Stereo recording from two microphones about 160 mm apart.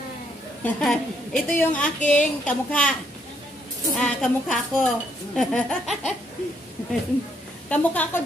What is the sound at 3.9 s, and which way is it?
A woman's voice, 5° left (ahead or behind).